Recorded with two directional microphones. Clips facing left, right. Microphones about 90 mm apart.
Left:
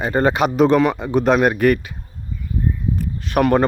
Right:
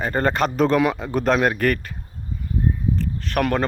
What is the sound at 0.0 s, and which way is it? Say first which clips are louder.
Speech: left 3 dB; 5° left (ahead or behind).